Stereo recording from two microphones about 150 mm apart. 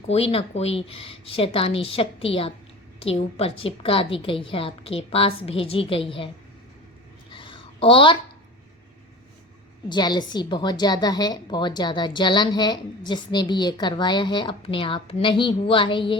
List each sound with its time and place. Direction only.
0.1 s a woman's voice: 40° left (ahead or behind)
7.3 s a sound: 35° left (ahead or behind)
9.9 s a woman's voice: 30° left (ahead or behind)